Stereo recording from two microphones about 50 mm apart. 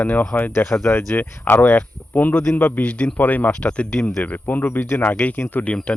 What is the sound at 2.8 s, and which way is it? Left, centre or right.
Speech, left.